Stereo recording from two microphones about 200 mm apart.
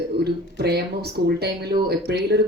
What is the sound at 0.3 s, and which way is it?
A woman's voice, 55° right (ahead or behind).